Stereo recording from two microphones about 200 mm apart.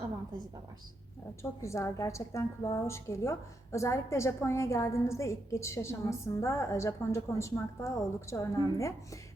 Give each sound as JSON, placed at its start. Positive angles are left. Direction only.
{"t": 1.4, "sound": "a woman's voice", "side_deg": 15}